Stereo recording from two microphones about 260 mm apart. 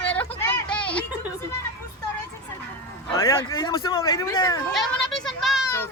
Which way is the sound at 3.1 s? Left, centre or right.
Centre.